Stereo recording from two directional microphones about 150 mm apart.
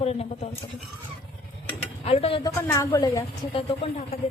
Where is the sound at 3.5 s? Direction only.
35° left (ahead or behind).